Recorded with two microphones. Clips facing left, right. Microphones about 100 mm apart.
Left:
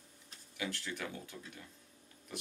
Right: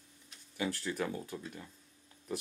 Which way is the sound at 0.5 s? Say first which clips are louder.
Right 6 dB; 35° right (ahead or behind).